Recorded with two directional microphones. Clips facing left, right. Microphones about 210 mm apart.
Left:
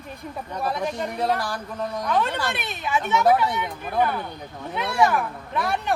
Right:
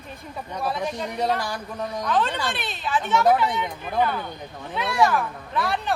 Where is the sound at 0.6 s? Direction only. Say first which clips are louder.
Left 1 dB; centre (ahead or behind).